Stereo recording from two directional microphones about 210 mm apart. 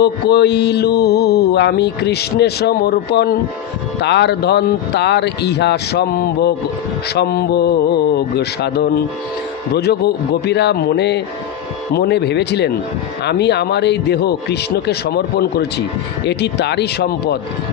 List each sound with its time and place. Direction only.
0.0 s mantra: 50° left (ahead or behind)